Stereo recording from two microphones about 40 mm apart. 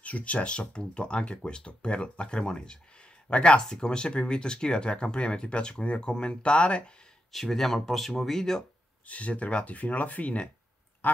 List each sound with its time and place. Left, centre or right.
0.0 s speech: left
7.3 s speech: centre
9.0 s speech: left